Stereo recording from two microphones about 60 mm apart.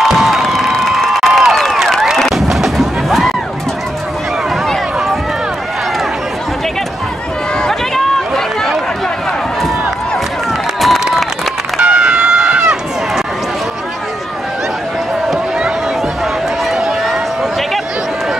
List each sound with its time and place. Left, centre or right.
0.0 s crowd: centre
7.6 s run: centre
11.8 s run: centre
16.7 s run: centre